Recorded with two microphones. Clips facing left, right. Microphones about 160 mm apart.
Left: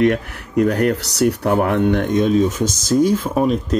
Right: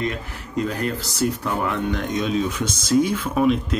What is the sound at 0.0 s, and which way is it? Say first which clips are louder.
Speech: left 10 dB; 70° left (ahead or behind).